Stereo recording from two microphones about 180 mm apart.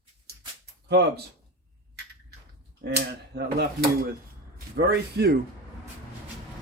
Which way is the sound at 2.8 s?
65° right (ahead or behind).